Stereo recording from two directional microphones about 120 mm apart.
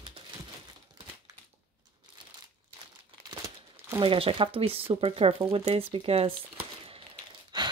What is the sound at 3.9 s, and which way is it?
Speech, 50° right (ahead or behind).